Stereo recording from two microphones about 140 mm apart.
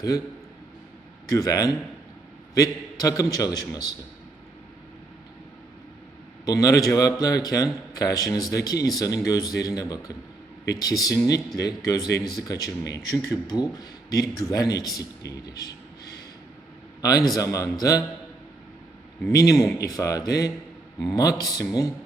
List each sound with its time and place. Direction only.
1.3 s a man's voice: 25° left (ahead or behind)
6.4 s a man's voice: 25° left (ahead or behind)
17.0 s a man's voice: 25° left (ahead or behind)
19.3 s a man's voice: 25° left (ahead or behind)